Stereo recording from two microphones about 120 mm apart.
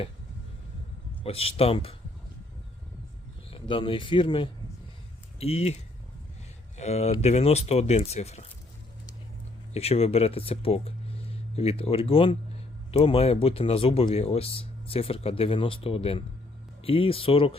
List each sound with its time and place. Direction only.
1.2 s speech: 55° left (ahead or behind)
3.5 s speech: 45° left (ahead or behind)
5.4 s speech: 60° left (ahead or behind)
9.7 s speech: 60° left (ahead or behind)